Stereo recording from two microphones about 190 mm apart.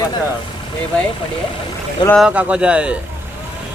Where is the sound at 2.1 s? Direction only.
Centre (ahead or behind).